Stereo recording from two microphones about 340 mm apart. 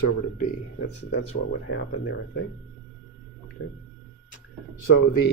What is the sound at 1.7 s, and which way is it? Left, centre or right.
Speech, left.